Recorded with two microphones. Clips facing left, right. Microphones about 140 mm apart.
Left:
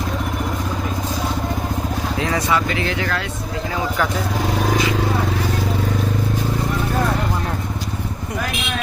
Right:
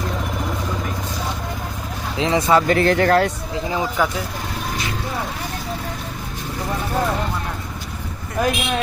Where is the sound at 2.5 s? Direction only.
45° right (ahead or behind).